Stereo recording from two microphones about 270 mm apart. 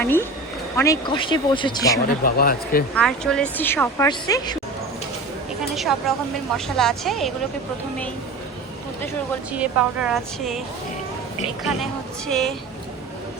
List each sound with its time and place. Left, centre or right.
0.0 s speech: centre
2.2 s speech: left
2.9 s speech: centre
5.7 s a woman's voice: centre
9.5 s a woman's voice: centre
12.3 s a woman's voice: centre